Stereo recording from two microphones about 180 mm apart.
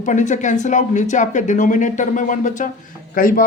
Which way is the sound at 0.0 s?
45° left (ahead or behind).